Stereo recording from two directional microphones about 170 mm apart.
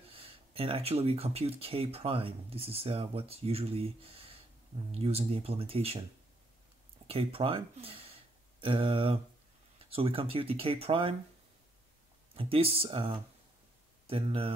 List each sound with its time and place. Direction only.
0.1 s speech: 35° right (ahead or behind)
7.1 s speech: 35° right (ahead or behind)
12.4 s speech: 35° right (ahead or behind)